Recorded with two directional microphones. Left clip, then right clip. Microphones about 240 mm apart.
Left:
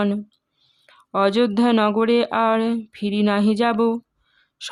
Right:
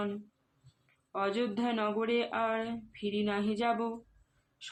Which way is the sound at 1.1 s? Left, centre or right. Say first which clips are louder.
Left 14 dB; left.